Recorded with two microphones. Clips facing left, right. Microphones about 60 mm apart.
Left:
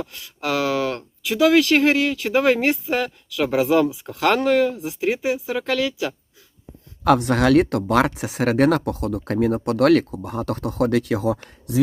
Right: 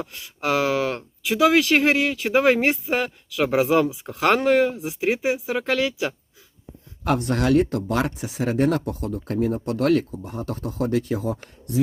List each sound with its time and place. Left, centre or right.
0.0 s speech: centre
7.2 s speech: left